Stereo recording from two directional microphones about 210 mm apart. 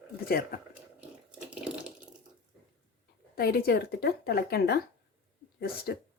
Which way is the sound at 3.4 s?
50° left (ahead or behind).